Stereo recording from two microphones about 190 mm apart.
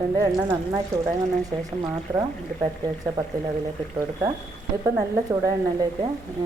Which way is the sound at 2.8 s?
20° right (ahead or behind).